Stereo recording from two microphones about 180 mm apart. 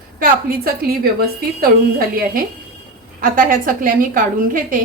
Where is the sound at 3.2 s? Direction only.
50° right (ahead or behind).